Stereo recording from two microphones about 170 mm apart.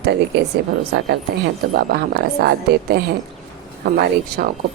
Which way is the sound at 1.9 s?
75° right (ahead or behind).